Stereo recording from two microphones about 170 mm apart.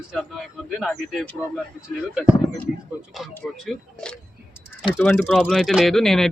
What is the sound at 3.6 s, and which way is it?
Speech, 5° left (ahead or behind).